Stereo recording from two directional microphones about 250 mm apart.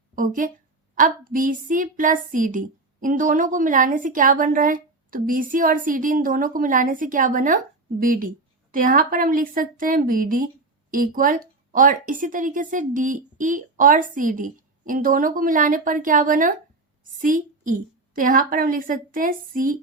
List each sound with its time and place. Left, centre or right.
0.2 s speech: right